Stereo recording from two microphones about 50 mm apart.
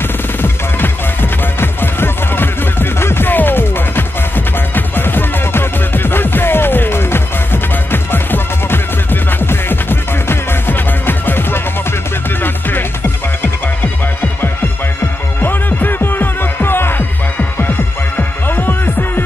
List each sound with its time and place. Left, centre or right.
0.4 s music: left
3.3 s music: left
15.4 s music: left